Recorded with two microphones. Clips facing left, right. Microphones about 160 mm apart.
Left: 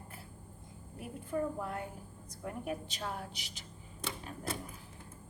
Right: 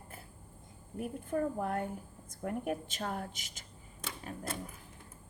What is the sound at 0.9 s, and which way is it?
A woman's voice, 50° right (ahead or behind).